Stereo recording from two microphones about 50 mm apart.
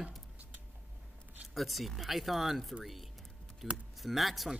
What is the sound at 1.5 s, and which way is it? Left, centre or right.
Speech, centre.